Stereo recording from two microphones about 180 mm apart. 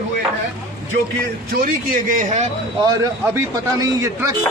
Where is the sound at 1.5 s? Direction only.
50° right (ahead or behind).